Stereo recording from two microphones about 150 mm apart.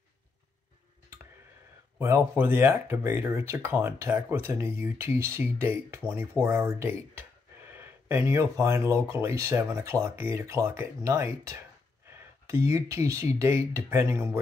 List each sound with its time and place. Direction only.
2.0 s speech: 15° right (ahead or behind)